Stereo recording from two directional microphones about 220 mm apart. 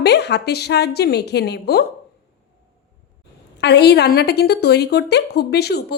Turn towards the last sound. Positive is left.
turn(degrees=50)  # may be behind; listen again after turning